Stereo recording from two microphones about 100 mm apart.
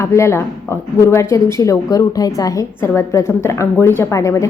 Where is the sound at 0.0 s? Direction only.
30° left (ahead or behind).